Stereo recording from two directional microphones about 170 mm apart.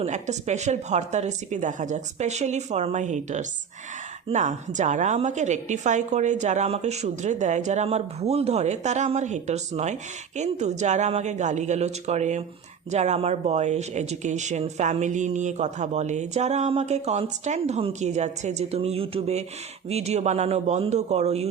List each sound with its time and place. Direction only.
0.0 s a woman's voice: 40° right (ahead or behind)